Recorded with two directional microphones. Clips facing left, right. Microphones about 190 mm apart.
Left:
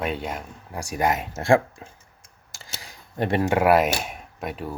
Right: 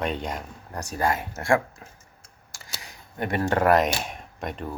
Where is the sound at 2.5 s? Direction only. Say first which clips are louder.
Left 1 dB; 25° left (ahead or behind).